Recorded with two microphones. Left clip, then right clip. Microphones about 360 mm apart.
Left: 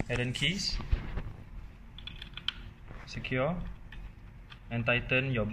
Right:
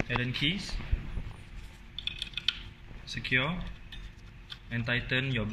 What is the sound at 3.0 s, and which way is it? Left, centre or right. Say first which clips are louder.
Speech: right 3 dB; left.